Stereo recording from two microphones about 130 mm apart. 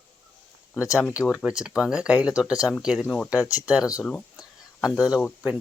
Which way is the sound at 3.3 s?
25° left (ahead or behind).